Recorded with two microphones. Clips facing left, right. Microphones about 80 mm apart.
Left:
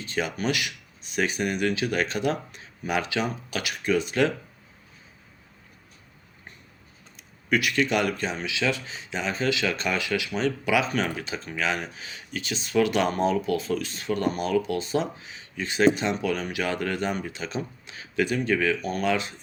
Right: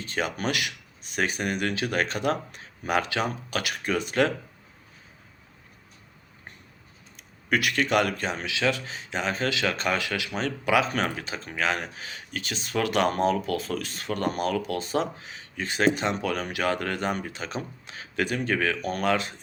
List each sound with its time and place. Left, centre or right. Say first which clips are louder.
0.0 s speech: left 1 dB; right
7.2 s speech: left 1 dB; right